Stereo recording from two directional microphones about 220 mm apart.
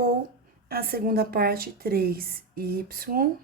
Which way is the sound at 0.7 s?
45° right (ahead or behind).